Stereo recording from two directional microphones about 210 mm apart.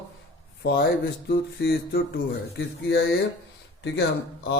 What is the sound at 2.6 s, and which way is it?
Speech, 65° left (ahead or behind).